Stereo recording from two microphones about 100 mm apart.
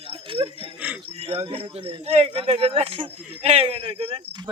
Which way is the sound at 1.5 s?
80° right.